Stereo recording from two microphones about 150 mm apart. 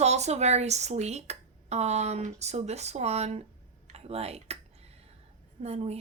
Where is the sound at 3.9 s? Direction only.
45° right (ahead or behind).